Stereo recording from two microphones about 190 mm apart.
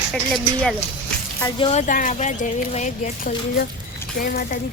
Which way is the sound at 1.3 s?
20° left (ahead or behind).